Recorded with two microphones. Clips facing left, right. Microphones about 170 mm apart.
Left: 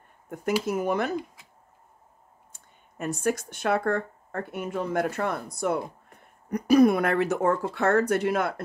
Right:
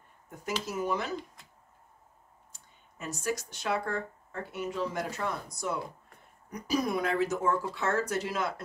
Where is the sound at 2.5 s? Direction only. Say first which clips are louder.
Left 11 dB; 55° left (ahead or behind).